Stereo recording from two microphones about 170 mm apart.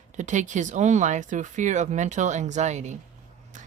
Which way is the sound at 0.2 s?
45° right (ahead or behind).